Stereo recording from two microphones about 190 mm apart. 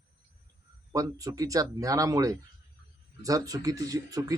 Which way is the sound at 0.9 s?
15° right (ahead or behind).